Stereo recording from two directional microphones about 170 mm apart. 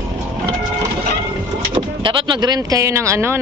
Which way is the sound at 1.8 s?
25° right (ahead or behind).